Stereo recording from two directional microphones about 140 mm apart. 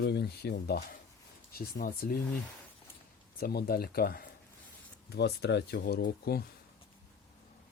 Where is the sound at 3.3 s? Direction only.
90° left.